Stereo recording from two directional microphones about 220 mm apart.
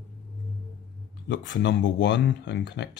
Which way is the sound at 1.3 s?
55° left (ahead or behind).